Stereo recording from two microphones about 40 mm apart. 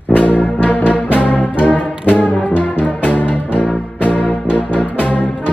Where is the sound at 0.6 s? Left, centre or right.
Left.